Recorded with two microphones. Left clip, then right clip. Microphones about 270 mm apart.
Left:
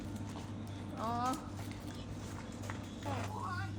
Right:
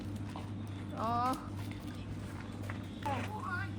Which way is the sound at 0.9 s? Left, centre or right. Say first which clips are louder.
Right 3 dB; centre.